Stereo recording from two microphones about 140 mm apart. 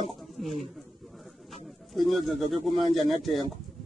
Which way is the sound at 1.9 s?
Centre (ahead or behind).